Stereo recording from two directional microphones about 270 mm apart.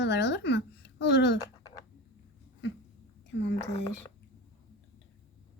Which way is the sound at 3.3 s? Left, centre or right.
Left.